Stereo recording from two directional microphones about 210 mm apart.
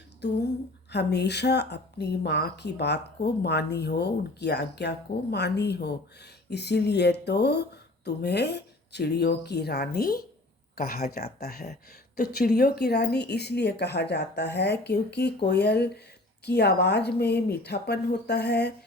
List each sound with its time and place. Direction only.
0.2 s speech: 55° left (ahead or behind)